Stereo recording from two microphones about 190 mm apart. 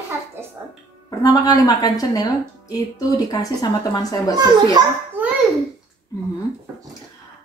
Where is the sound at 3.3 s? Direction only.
20° left (ahead or behind).